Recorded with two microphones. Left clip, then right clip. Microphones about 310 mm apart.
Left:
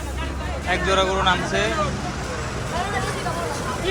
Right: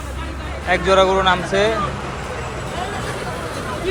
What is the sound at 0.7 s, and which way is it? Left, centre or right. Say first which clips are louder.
Speech: right 6 dB; centre.